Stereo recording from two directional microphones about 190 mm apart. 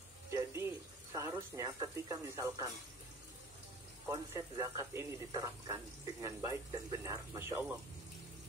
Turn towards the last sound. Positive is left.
turn(degrees=-10)  # may be behind; listen again after turning